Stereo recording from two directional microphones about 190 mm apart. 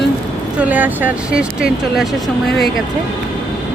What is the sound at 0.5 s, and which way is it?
Speech, 10° right (ahead or behind).